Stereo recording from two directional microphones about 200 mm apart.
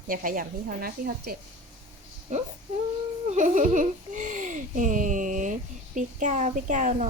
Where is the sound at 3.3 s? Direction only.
40° right (ahead or behind).